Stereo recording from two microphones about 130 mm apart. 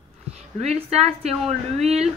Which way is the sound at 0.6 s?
55° right (ahead or behind).